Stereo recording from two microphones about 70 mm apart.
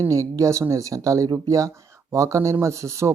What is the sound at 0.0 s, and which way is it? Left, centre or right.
Speech, right.